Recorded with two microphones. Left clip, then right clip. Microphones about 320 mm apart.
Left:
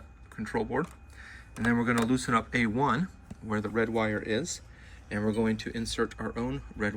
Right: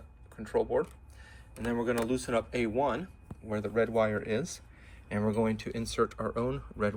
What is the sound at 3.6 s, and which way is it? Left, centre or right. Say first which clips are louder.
Speech: right 2 dB; centre.